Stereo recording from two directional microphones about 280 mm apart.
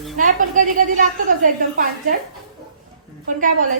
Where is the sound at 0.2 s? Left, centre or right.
Right.